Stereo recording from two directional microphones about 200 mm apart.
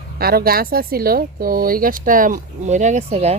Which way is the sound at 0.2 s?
50° right (ahead or behind).